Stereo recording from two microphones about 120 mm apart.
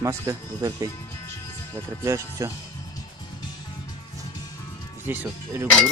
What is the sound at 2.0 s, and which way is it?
Speech, 25° right (ahead or behind).